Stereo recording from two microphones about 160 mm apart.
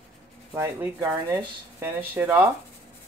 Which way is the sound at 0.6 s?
10° right (ahead or behind).